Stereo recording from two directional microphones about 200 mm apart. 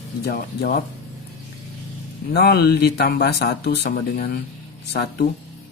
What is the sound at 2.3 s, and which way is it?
A man's voice, 50° left (ahead or behind).